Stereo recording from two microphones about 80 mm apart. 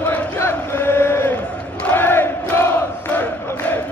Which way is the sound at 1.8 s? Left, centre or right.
Left.